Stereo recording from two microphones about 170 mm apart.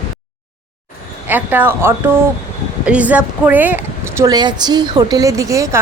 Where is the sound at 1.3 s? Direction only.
10° right (ahead or behind).